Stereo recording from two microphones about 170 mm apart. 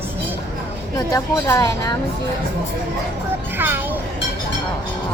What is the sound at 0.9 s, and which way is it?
Speech, 20° left (ahead or behind).